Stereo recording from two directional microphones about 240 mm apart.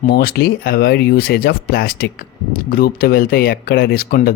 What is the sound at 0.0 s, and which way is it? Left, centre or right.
Speech, left.